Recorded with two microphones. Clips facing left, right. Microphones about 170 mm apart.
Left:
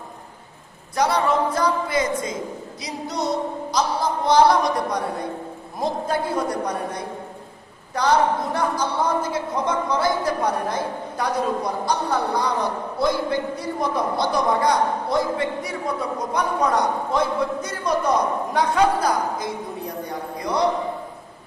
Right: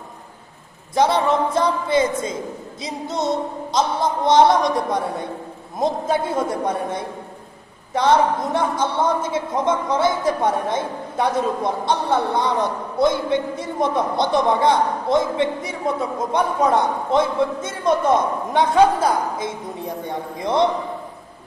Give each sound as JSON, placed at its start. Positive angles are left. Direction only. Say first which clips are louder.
{"t": 0.9, "sound": "a woman's voice", "louder": "right 3 dB", "side_deg": -25}
{"t": 5.8, "sound": "a woman's voice", "louder": "right 3 dB", "side_deg": -25}
{"t": 7.9, "sound": "a woman's voice", "louder": "right 2 dB", "side_deg": -25}